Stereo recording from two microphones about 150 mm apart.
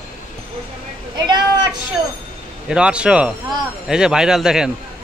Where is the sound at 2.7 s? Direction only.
5° right (ahead or behind).